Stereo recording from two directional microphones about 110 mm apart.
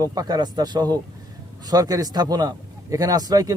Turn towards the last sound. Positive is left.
turn(degrees=-35)  # may be behind; listen again after turning